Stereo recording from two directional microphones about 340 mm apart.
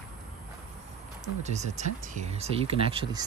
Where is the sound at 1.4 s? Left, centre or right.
Centre.